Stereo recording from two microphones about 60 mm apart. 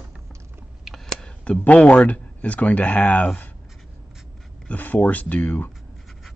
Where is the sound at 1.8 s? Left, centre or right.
Left.